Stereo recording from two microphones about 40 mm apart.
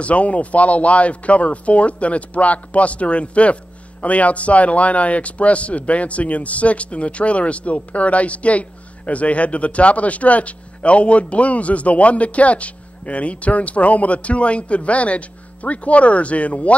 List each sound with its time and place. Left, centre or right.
0.0 s a man's voice: left